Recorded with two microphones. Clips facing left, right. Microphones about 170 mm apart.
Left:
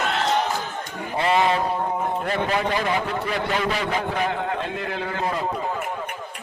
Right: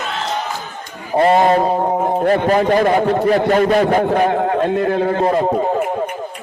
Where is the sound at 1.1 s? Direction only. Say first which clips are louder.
Right 8 dB; 45° right (ahead or behind).